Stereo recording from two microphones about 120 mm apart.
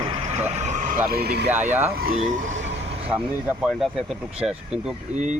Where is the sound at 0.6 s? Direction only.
80° right.